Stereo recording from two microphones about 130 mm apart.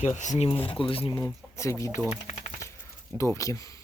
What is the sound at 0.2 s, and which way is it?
Speech, 70° left (ahead or behind).